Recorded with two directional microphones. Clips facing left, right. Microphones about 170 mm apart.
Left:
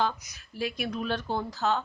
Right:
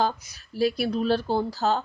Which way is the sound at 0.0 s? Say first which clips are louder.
Right 3 dB; 35° right (ahead or behind).